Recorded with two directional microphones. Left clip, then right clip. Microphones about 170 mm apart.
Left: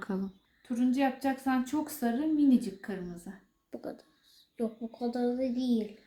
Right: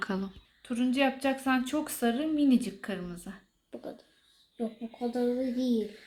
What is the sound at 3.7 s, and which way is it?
Speech, 25° left (ahead or behind).